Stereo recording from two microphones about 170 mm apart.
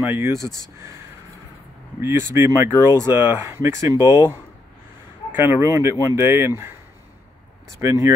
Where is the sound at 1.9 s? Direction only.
15° right (ahead or behind).